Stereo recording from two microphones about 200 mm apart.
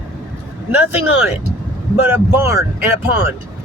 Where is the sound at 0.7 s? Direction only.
10° right (ahead or behind).